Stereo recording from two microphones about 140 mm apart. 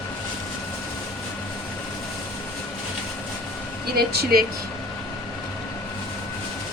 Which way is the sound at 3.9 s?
90° right.